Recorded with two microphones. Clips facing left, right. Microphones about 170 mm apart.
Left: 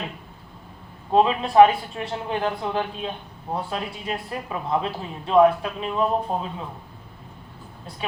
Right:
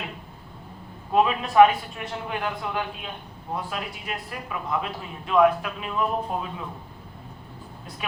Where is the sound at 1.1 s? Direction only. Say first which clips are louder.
Left 2 dB; 30° left (ahead or behind).